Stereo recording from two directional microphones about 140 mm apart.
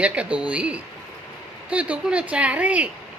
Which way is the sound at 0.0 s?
10° right (ahead or behind).